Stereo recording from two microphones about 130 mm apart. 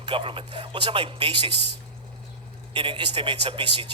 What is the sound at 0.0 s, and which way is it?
A man's voice, 40° right (ahead or behind).